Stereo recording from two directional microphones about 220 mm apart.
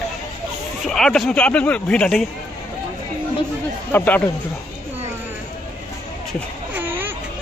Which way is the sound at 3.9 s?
5° left (ahead or behind).